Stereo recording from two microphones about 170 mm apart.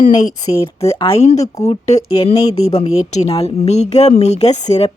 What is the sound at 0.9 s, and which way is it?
A woman's voice, 35° left (ahead or behind).